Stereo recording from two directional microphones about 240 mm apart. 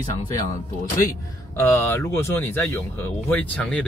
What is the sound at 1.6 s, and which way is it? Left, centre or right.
Speech, centre.